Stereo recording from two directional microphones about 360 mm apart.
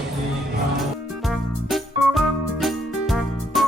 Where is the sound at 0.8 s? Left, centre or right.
Centre.